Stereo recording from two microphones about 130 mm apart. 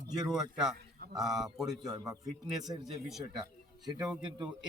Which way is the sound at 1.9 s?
30° right (ahead or behind).